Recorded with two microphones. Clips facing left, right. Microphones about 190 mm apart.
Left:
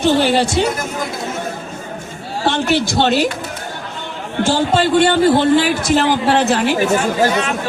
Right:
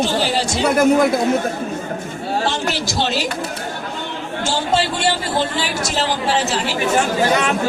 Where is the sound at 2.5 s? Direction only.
60° left (ahead or behind).